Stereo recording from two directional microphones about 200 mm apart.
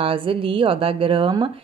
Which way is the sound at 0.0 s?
25° right (ahead or behind).